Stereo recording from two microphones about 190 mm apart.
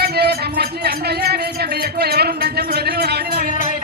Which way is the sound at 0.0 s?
55° right (ahead or behind).